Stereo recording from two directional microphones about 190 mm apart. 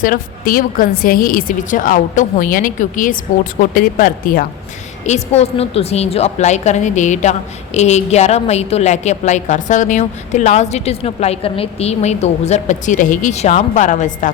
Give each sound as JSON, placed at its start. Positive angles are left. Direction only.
{"t": 0.0, "sound": "a woman's voice", "side_deg": 50}
{"t": 5.0, "sound": "a woman's voice", "side_deg": 35}